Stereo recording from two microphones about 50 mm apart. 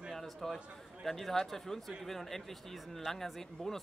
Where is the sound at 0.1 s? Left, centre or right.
Centre.